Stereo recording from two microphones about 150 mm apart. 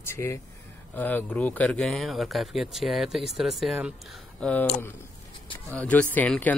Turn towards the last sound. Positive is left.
turn(degrees=10)  # may be behind; listen again after turning